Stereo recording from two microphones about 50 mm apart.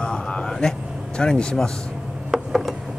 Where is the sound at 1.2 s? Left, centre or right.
Centre.